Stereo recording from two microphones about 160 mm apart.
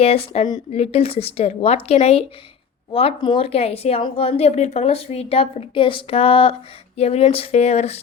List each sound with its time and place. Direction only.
0.0 s speech: 40° left (ahead or behind)